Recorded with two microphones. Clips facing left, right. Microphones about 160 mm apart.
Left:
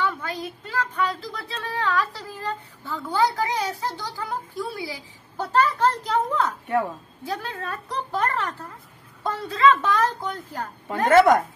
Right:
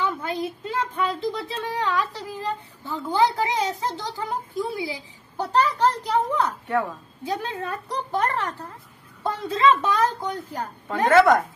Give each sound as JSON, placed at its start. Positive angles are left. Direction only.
{"t": 0.0, "sound": "a woman's voice", "side_deg": -20}